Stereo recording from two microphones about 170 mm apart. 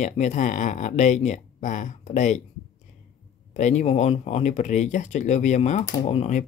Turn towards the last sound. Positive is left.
turn(degrees=40)  # may be behind; listen again after turning